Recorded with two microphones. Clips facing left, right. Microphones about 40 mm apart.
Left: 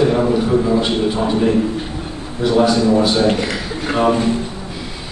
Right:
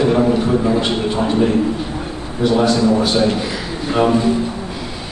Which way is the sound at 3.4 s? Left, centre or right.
Left.